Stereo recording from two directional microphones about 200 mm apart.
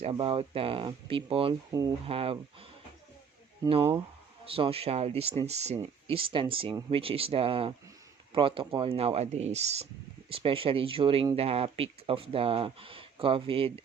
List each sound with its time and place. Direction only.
0.0 s speech: 30° right (ahead or behind)